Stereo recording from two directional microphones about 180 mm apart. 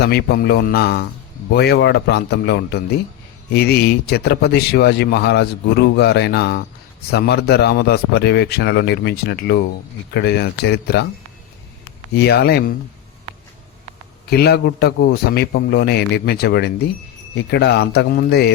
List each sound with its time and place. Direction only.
0.0 s a man's voice: 65° left (ahead or behind)
12.1 s a man's voice: 65° left (ahead or behind)
14.3 s a man's voice: 65° left (ahead or behind)